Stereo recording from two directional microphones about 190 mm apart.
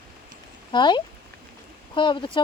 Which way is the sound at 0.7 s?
25° left (ahead or behind).